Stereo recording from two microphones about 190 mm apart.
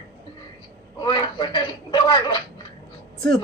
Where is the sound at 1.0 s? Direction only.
25° left (ahead or behind).